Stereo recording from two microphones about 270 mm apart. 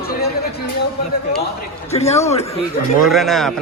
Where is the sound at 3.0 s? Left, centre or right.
Centre.